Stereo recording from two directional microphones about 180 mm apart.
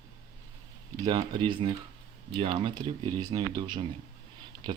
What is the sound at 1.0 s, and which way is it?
Speech, 25° right (ahead or behind).